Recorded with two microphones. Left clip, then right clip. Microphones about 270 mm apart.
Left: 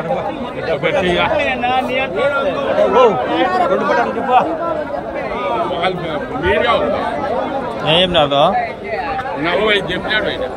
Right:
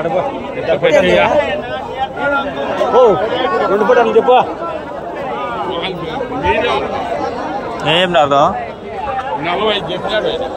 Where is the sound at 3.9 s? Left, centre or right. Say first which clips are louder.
Right 4 dB; right.